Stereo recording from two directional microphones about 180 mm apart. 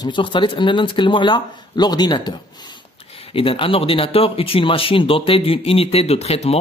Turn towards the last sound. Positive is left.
turn(degrees=35)  # may be behind; listen again after turning